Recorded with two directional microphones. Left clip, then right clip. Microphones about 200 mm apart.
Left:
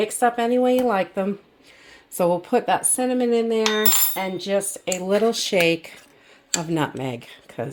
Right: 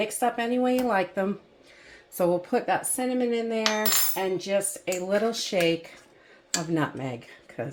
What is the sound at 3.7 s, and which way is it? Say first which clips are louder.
Cutlery: left 4 dB; 50° left (ahead or behind).